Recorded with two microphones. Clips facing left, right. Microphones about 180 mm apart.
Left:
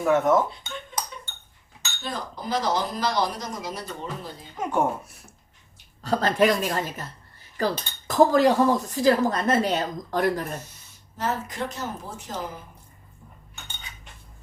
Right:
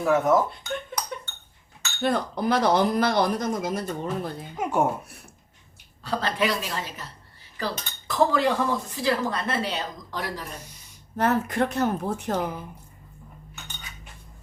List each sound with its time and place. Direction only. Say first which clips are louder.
0.0 s speech: left 1 dB; centre (ahead or behind)
2.0 s speech: right 9 dB; 60° right (ahead or behind)
4.5 s speech: even; 10° right (ahead or behind)
6.0 s speech: left 5 dB; 45° left (ahead or behind)
11.2 s speech: right 6 dB; 60° right (ahead or behind)